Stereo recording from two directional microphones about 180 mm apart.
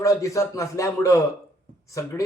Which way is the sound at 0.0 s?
15° left (ahead or behind).